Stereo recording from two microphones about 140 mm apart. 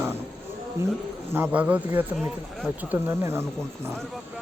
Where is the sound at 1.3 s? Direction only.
15° right (ahead or behind).